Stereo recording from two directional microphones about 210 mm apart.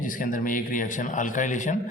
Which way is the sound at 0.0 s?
40° left (ahead or behind).